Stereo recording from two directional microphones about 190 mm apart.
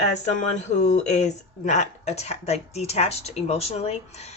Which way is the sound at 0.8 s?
35° left (ahead or behind).